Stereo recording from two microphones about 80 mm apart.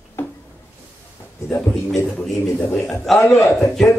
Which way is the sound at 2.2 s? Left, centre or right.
Centre.